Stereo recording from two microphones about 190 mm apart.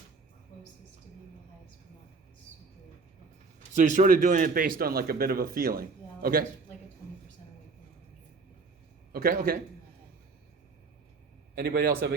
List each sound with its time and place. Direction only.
3.8 s speech: 40° right (ahead or behind)
9.1 s speech: 50° right (ahead or behind)
11.5 s a man's voice: 60° right (ahead or behind)